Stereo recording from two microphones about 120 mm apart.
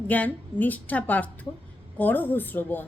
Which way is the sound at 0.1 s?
10° left (ahead or behind).